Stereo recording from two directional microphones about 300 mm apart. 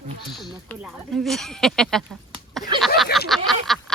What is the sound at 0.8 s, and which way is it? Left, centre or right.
Speech, centre.